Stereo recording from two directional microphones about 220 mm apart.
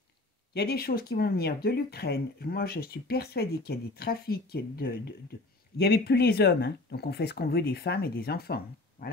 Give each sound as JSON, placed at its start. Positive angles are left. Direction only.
{"t": 0.5, "sound": "speech", "side_deg": 45}